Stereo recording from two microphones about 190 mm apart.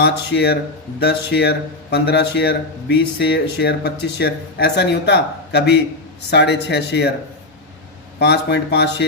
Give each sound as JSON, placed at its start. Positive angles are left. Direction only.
{"t": 0.0, "sound": "speech", "side_deg": 60}
{"t": 8.2, "sound": "speech", "side_deg": 60}